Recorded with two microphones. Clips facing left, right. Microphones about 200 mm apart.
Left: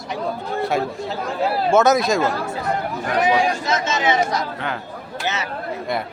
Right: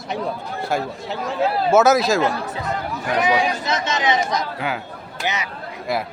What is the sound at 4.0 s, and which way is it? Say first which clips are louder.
Speech: left 1 dB; 10° right (ahead or behind).